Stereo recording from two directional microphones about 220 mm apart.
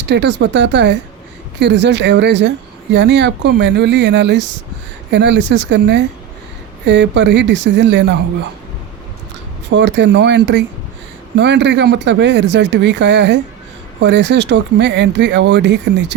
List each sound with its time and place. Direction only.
0.0 s speech: 50° right (ahead or behind)
9.7 s speech: 55° right (ahead or behind)